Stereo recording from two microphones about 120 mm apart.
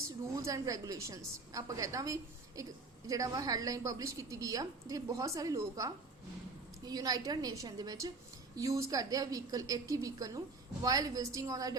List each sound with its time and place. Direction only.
0.3 s a woman's voice: 30° right (ahead or behind)